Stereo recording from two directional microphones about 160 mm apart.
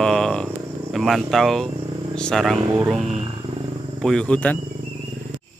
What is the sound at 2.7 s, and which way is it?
Speech, 10° right (ahead or behind).